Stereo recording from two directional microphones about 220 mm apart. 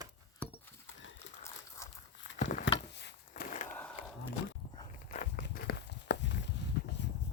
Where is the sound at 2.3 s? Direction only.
35° left (ahead or behind).